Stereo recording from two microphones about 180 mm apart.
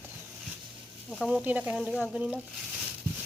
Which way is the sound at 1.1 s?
Centre (ahead or behind).